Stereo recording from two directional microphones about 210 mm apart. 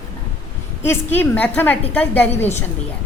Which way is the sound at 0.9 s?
10° left (ahead or behind).